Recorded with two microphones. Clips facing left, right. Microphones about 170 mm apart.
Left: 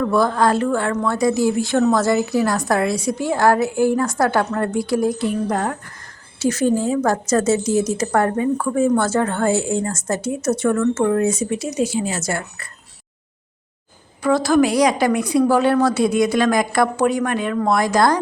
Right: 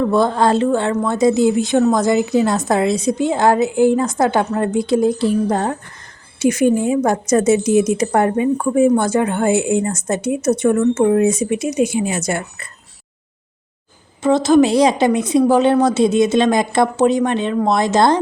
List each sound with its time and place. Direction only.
0.0 s a woman's voice: 20° right (ahead or behind)
6.4 s a woman's voice: 15° right (ahead or behind)
14.2 s a woman's voice: 20° right (ahead or behind)